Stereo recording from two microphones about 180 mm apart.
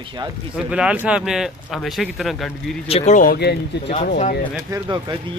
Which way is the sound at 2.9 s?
35° left (ahead or behind).